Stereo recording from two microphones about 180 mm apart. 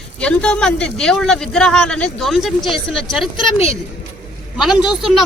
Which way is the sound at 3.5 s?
35° left (ahead or behind).